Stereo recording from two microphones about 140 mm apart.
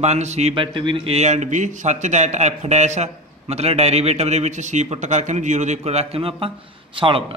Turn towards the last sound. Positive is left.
turn(degrees=-40)  # may be behind; listen again after turning